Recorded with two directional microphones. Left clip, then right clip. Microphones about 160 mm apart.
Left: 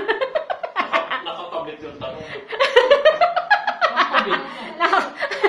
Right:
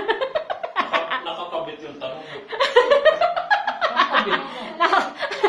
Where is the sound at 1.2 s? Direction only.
20° right (ahead or behind).